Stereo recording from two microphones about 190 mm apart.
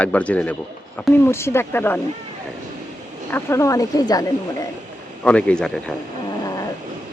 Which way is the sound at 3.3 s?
15° left (ahead or behind).